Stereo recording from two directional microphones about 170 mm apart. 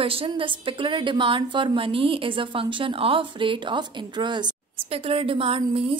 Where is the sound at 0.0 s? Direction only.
30° right (ahead or behind).